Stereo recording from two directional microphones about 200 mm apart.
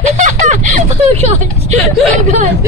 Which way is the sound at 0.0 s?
35° right (ahead or behind).